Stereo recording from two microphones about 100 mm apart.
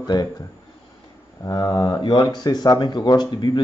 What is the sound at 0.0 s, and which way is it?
Speech, 45° left (ahead or behind).